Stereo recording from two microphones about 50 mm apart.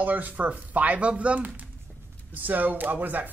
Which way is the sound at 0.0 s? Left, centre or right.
Right.